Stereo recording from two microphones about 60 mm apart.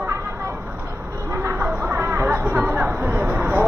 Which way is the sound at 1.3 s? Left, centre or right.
Right.